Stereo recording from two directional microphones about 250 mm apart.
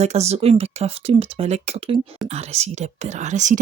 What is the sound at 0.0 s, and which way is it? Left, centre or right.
Speech, right.